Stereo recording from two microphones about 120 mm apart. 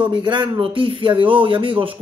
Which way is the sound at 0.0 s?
40° right (ahead or behind).